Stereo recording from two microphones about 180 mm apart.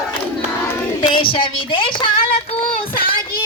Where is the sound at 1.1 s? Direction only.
30° left (ahead or behind).